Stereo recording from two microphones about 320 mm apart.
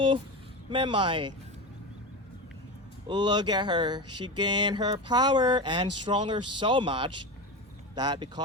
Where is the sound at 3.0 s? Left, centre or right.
Centre.